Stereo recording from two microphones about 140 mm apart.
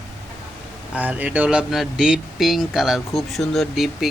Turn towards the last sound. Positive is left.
turn(degrees=0)  # may be behind; listen again after turning